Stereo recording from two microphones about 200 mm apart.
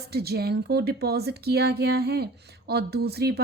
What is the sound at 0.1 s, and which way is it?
Speech, 50° right (ahead or behind).